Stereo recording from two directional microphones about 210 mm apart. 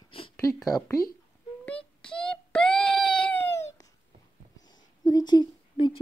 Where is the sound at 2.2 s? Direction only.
5° left (ahead or behind).